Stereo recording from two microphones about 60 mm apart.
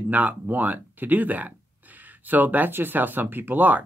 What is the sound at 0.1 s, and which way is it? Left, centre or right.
Speech, right.